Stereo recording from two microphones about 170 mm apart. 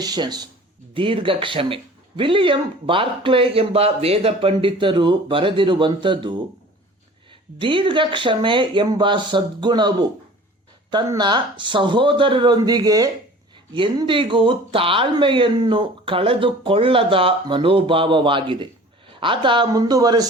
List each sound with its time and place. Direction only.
0.0 s speech: 25° right (ahead or behind)
7.6 s speech: 30° right (ahead or behind)